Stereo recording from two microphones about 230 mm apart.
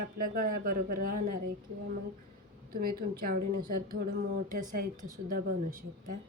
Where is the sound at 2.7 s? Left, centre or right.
Right.